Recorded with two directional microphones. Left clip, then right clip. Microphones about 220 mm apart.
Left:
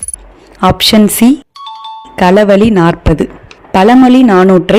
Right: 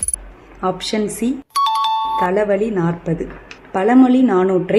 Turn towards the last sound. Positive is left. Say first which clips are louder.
# left 9 dB
turn(degrees=40)  # may be behind; listen again after turning